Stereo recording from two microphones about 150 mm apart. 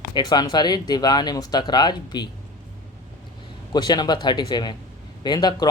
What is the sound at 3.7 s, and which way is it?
Speech, 30° left (ahead or behind).